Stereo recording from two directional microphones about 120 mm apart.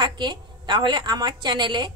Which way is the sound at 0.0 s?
40° right (ahead or behind).